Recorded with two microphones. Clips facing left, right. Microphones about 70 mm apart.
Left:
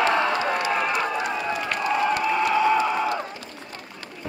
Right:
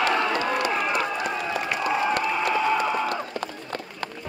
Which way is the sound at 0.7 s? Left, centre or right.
Centre.